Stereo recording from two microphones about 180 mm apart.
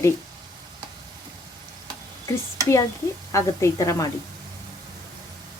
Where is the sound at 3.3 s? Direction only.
15° left (ahead or behind).